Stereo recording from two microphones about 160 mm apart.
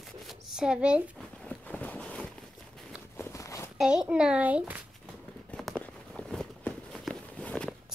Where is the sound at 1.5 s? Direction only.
10° left (ahead or behind).